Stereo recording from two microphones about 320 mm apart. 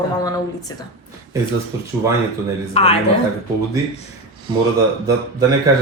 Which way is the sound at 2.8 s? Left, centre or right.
Centre.